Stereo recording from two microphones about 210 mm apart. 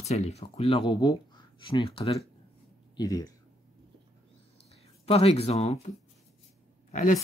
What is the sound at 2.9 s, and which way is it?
Speech, 15° left (ahead or behind).